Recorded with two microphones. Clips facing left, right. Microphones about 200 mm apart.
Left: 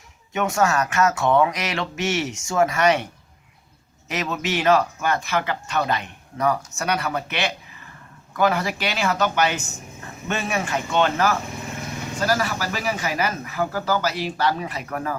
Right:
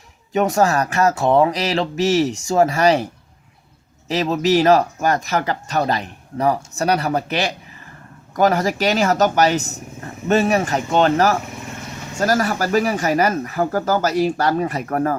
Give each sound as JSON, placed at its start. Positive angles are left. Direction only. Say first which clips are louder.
{"t": 0.3, "sound": "speech", "louder": "right 4 dB", "side_deg": -35}
{"t": 4.1, "sound": "speech", "louder": "right 9 dB", "side_deg": -30}